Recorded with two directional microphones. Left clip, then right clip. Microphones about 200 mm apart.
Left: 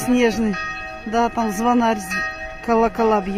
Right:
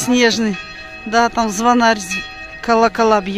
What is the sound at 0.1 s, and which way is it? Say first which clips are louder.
Speech: right 4 dB; centre (ahead or behind).